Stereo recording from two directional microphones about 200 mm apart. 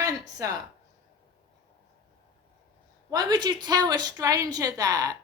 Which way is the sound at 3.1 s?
20° right (ahead or behind).